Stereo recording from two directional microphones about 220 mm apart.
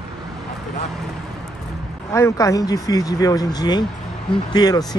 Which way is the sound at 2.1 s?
15° left (ahead or behind).